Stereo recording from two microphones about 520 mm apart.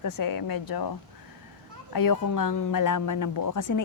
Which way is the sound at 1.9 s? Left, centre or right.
Left.